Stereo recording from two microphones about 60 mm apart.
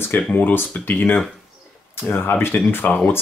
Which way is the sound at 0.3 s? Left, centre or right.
Left.